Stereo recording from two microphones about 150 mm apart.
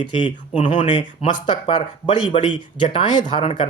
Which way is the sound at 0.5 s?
50° left (ahead or behind).